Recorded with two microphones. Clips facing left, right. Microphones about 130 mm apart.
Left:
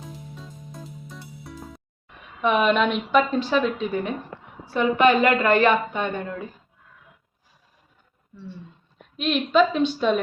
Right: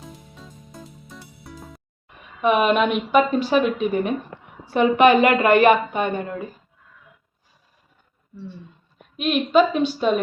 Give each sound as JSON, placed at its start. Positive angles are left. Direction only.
{"t": 0.0, "sound": "music", "side_deg": 0}
{"t": 2.4, "sound": "a woman's voice", "side_deg": -5}
{"t": 9.1, "sound": "a woman's voice", "side_deg": -5}